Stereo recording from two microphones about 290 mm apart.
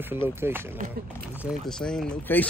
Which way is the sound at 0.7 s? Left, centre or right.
Right.